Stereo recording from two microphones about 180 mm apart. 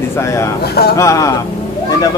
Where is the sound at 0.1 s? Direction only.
15° left (ahead or behind).